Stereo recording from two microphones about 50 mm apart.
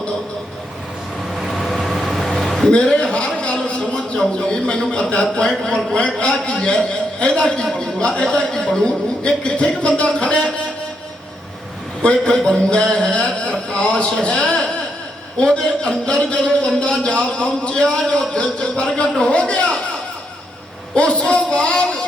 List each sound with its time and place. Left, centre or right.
1.3 s vehicle: centre
2.6 s a sound: centre
4.3 s speech: centre
12.0 s speech: left
20.9 s speech: left